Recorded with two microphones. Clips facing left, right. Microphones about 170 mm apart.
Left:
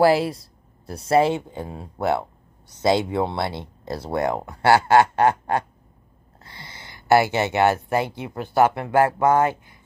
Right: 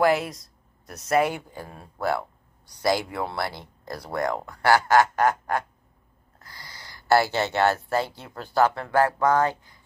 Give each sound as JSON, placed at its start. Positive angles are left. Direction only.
{"t": 0.0, "sound": "speech", "side_deg": 30}